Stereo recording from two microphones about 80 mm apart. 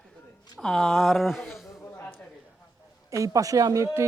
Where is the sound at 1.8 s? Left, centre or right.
Left.